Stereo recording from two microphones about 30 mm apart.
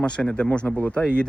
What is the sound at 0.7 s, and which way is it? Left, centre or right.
Speech, left.